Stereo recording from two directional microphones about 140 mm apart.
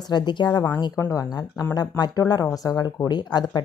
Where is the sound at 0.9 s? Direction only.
25° left (ahead or behind).